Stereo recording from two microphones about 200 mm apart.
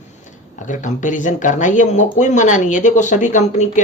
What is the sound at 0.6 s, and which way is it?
Speech, 40° left (ahead or behind).